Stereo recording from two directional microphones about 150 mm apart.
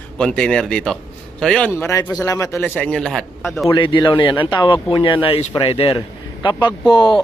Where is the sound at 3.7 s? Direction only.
30° left (ahead or behind).